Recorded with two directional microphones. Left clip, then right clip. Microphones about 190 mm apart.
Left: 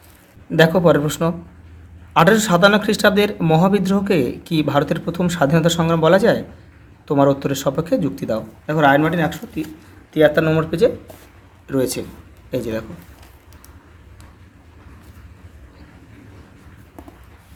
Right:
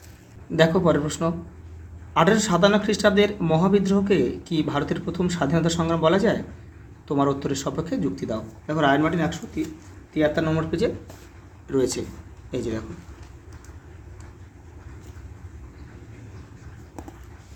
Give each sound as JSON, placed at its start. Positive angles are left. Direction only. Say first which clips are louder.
{"t": 0.5, "sound": "a man's voice", "louder": "left 6 dB", "side_deg": 30}